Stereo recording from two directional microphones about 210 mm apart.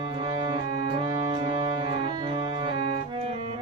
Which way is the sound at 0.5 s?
25° right (ahead or behind).